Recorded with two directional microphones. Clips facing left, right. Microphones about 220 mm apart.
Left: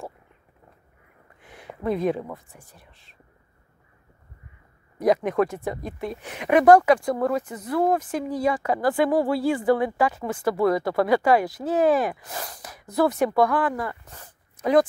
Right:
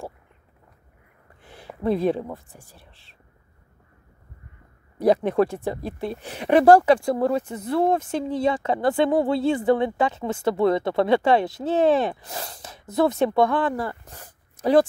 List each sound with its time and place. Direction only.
1.4 s a sound: 30° right (ahead or behind)
1.8 s speech: 30° right (ahead or behind)
4.9 s speech: 30° right (ahead or behind)